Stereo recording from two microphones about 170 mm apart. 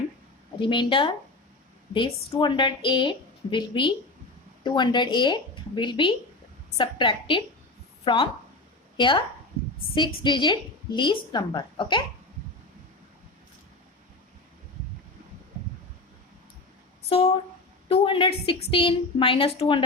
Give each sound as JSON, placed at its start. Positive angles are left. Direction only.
{"t": 0.6, "sound": "a woman's voice", "side_deg": 30}
{"t": 17.1, "sound": "a woman's voice", "side_deg": 35}